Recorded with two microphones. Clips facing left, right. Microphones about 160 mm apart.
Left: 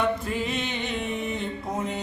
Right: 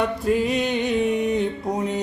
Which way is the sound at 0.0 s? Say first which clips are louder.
Right 5 dB; 45° right (ahead or behind).